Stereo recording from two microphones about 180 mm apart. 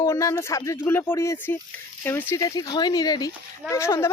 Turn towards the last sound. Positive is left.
turn(degrees=15)  # may be behind; listen again after turning